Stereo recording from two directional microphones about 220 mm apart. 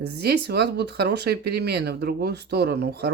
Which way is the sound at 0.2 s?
45° right (ahead or behind).